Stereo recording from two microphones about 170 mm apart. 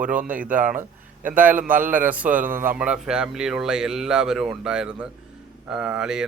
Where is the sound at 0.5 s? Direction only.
50° right (ahead or behind).